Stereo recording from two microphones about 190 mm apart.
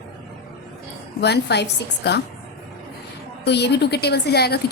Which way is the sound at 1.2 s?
60° left (ahead or behind).